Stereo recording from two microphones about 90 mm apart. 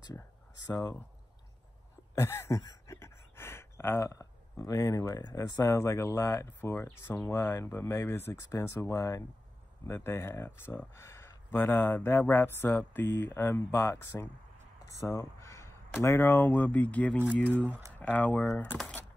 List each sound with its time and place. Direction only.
0.7 s speech: 35° left (ahead or behind)
2.1 s speech: 30° left (ahead or behind)
15.0 s crow: 35° left (ahead or behind)
16.0 s speech: 25° left (ahead or behind)